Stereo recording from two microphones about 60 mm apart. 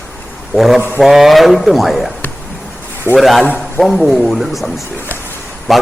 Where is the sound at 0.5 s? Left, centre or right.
Centre.